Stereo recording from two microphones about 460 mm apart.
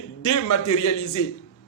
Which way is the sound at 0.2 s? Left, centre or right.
Left.